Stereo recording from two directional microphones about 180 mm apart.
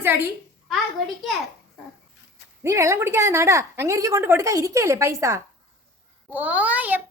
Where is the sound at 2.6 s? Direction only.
15° right (ahead or behind).